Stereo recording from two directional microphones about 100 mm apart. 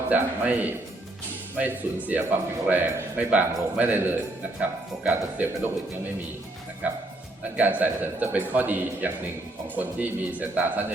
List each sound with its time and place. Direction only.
0.1 s a man's voice: 15° right (ahead or behind)
7.5 s a man's voice: 15° right (ahead or behind)